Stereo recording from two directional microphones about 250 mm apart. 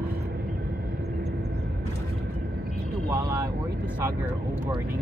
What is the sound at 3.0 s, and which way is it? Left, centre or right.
Speech, centre.